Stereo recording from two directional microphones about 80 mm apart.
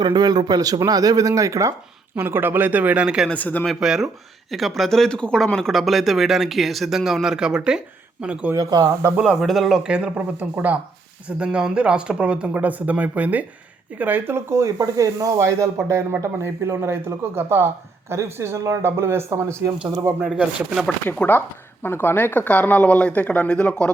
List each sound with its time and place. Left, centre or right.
0.0 s speech: right
2.1 s speech: right
3.2 s speech: centre
3.8 s speech: centre
8.5 s speech: right
9.2 s speech: centre
11.3 s speech: centre; by 19.7 s right
20.2 s speech: centre
21.1 s speech: left